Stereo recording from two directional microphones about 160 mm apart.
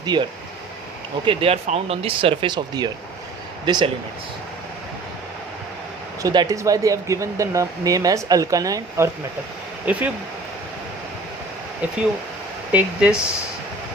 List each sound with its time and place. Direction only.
0.0 s speech: 25° right (ahead or behind)
6.2 s speech: 25° right (ahead or behind)
9.8 s speech: 10° right (ahead or behind)
12.7 s speech: 5° right (ahead or behind)